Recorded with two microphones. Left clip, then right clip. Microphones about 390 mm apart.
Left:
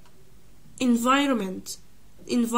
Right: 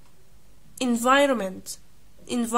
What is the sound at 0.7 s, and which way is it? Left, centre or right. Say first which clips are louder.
Speech: right 2 dB; centre.